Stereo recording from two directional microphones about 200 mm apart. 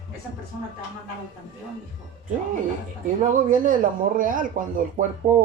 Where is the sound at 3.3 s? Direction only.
40° right (ahead or behind).